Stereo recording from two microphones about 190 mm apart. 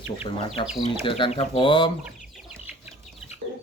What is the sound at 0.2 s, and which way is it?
Speech, 30° left (ahead or behind).